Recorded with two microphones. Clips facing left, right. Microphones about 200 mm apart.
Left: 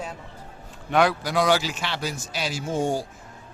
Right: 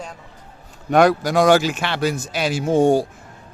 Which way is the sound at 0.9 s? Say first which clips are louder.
Right 6 dB; 45° right (ahead or behind).